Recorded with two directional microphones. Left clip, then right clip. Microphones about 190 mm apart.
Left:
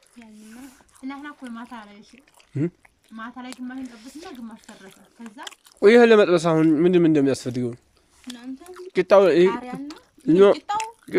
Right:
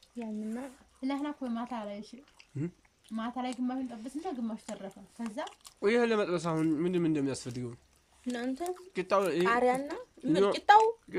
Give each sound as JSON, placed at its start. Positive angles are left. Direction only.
{"t": 1.0, "sound": "speech", "side_deg": -25}
{"t": 2.5, "sound": "speech", "side_deg": 50}
{"t": 3.2, "sound": "speech", "side_deg": -30}
{"t": 3.9, "sound": "speech", "side_deg": 50}
{"t": 4.4, "sound": "speech", "side_deg": -30}
{"t": 5.5, "sound": "speech", "side_deg": 55}
{"t": 8.4, "sound": "speech", "side_deg": -45}
{"t": 8.7, "sound": "speech", "side_deg": 50}
{"t": 9.5, "sound": "speech", "side_deg": -45}
{"t": 9.9, "sound": "speech", "side_deg": 55}